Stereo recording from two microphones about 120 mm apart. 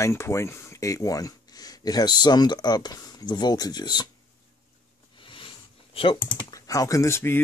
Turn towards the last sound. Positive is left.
turn(degrees=20)  # may be behind; listen again after turning